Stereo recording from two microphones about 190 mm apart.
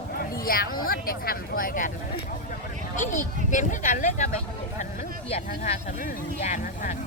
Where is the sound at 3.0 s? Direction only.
40° left (ahead or behind).